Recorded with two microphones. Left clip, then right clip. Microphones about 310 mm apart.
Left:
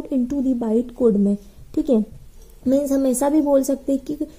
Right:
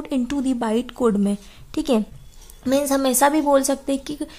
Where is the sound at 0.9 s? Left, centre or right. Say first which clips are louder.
Left 5 dB; right.